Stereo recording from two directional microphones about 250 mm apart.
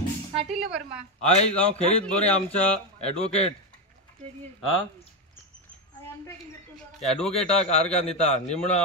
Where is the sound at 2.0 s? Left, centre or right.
Centre.